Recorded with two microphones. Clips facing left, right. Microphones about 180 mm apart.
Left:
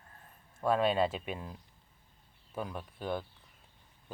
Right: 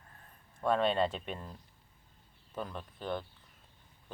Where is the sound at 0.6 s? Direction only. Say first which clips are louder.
Left 1 dB; 5° left (ahead or behind).